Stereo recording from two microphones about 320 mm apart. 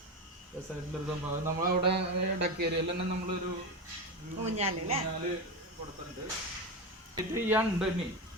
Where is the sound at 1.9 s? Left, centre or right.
Right.